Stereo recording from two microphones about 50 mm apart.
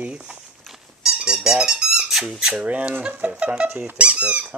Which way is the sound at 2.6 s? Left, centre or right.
Right.